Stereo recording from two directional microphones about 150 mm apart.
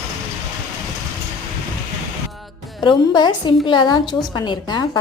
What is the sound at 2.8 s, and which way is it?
A woman's voice, 30° left (ahead or behind).